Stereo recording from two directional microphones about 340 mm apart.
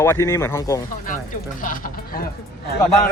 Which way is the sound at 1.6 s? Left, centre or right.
Left.